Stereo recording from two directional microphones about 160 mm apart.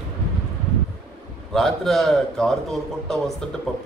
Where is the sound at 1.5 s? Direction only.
Centre (ahead or behind).